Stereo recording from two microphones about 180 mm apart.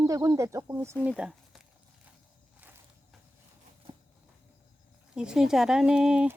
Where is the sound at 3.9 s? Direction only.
25° right (ahead or behind).